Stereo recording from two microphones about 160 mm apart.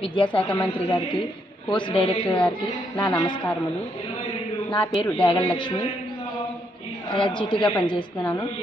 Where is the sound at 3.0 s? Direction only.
30° left (ahead or behind).